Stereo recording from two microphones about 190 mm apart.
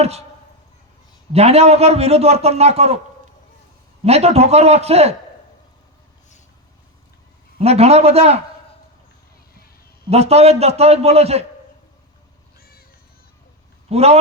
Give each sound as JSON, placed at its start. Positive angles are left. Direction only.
{"t": 1.3, "sound": "a man's voice", "side_deg": -35}
{"t": 4.0, "sound": "a man's voice", "side_deg": -35}
{"t": 7.6, "sound": "a man's voice", "side_deg": -35}
{"t": 10.1, "sound": "a man's voice", "side_deg": -35}
{"t": 13.9, "sound": "a man's voice", "side_deg": -35}